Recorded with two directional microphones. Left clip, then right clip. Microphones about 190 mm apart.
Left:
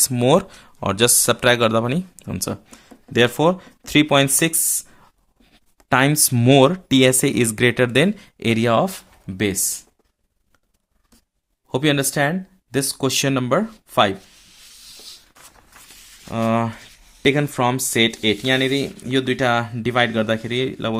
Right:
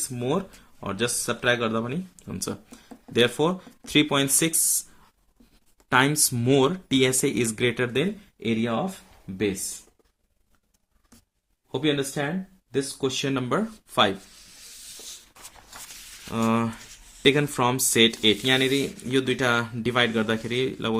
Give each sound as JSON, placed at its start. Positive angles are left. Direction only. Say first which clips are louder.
{"t": 0.1, "sound": "speech", "louder": "left 10 dB", "side_deg": 55}
{"t": 5.9, "sound": "speech", "louder": "left 4 dB", "side_deg": 35}
{"t": 8.0, "sound": "speech", "louder": "left 8 dB", "side_deg": 55}
{"t": 11.7, "sound": "speech", "louder": "left 6 dB", "side_deg": 55}
{"t": 13.3, "sound": "speech", "louder": "left 7 dB", "side_deg": 30}
{"t": 16.3, "sound": "speech", "louder": "left 5 dB", "side_deg": 20}